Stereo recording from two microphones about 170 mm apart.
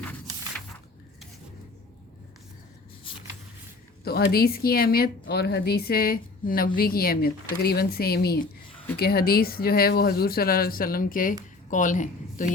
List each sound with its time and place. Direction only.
3.1 s vehicle: 30° left (ahead or behind)
4.0 s a woman's voice: 65° left (ahead or behind); by 12.5 s 50° left (ahead or behind)